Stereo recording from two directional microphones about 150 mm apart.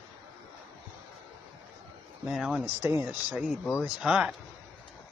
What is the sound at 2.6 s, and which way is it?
Speech, 15° right (ahead or behind).